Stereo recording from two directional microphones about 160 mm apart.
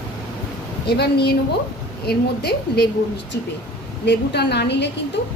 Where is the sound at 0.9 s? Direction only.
90° left.